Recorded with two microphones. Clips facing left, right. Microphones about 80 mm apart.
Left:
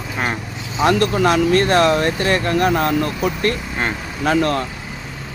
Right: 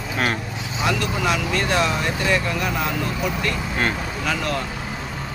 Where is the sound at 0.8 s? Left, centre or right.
Left.